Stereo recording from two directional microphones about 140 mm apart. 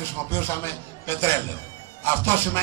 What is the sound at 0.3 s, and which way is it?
A man's voice, 20° left (ahead or behind).